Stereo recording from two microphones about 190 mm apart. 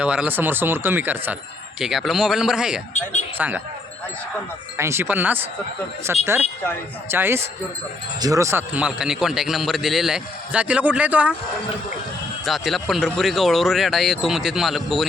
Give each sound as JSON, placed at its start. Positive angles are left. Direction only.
{"t": 0.0, "sound": "a man's voice", "side_deg": -5}
{"t": 2.9, "sound": "speech", "side_deg": 40}
{"t": 3.3, "sound": "speech", "side_deg": -10}
{"t": 4.8, "sound": "a man's voice", "side_deg": -15}
{"t": 12.5, "sound": "a man's voice", "side_deg": 0}